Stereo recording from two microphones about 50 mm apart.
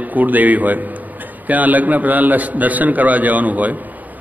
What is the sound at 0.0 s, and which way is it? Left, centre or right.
A man's voice, right.